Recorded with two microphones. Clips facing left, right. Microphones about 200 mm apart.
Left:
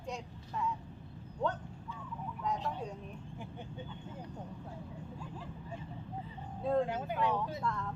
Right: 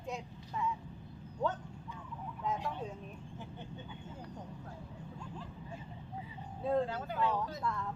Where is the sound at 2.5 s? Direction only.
5° right (ahead or behind).